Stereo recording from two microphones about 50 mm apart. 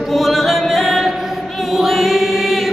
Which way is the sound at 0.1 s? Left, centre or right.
Centre.